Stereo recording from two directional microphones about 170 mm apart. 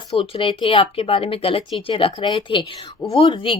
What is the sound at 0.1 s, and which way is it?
Speech, 35° left (ahead or behind).